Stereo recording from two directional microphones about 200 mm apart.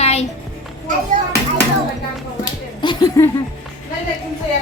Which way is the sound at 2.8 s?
20° left (ahead or behind).